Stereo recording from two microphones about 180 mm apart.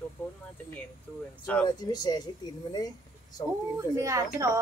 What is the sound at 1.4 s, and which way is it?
Speech, 5° left (ahead or behind).